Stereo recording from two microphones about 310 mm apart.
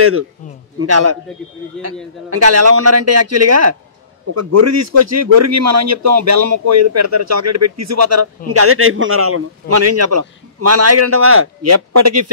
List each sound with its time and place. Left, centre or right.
0.7 s a man's voice: right
2.2 s a man's voice: right
8.5 s a man's voice: right